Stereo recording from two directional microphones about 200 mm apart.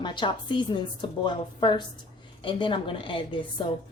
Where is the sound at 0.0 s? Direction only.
25° left (ahead or behind).